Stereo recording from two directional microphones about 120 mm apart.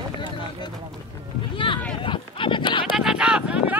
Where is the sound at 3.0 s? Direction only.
5° right (ahead or behind).